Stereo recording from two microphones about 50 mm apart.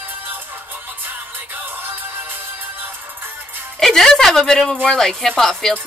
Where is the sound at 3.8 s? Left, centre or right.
Centre.